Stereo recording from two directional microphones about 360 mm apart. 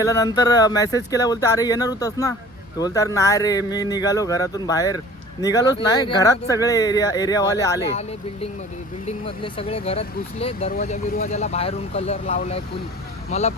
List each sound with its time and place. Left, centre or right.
0.0 s speech: centre
9.0 s speech: centre